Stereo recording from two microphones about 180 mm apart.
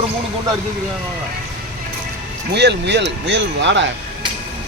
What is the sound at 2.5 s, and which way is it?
Speech, 70° right (ahead or behind).